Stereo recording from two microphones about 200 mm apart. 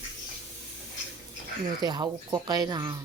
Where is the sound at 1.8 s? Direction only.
20° right (ahead or behind).